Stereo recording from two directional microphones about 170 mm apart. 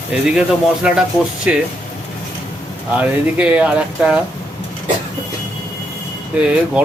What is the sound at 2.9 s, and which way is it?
Speech, 5° right (ahead or behind).